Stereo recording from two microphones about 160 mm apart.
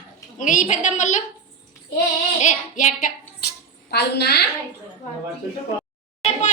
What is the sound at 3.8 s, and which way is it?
Speech, 90° left.